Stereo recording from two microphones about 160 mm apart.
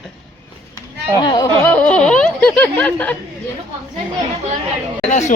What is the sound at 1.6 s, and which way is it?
Speech, 10° left (ahead or behind).